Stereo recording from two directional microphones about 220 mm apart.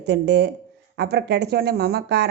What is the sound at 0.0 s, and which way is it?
Speech, 50° right (ahead or behind).